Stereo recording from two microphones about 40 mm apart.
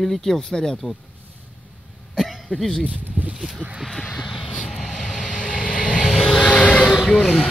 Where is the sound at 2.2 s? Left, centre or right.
Centre.